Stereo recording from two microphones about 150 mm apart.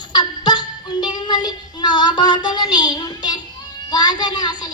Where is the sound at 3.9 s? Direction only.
30° left (ahead or behind).